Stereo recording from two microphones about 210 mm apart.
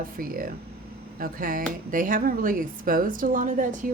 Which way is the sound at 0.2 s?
40° right (ahead or behind).